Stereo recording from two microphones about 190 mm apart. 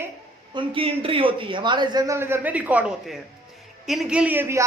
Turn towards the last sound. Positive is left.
turn(degrees=-15)  # may be behind; listen again after turning